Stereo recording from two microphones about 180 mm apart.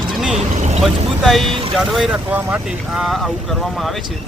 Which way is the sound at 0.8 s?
Centre (ahead or behind).